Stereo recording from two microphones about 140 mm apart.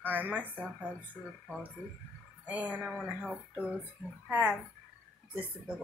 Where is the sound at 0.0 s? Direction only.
10° right (ahead or behind).